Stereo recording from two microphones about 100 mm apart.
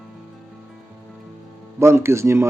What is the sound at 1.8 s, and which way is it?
Speech, 25° right (ahead or behind).